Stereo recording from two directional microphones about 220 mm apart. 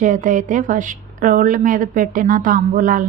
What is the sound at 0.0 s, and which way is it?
Speech, 35° right (ahead or behind).